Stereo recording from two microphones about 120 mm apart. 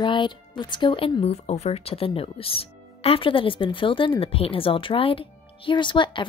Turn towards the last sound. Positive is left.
turn(degrees=40)  # may be behind; listen again after turning